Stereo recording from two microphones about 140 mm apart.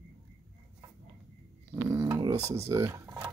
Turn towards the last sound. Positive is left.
turn(degrees=-20)  # may be behind; listen again after turning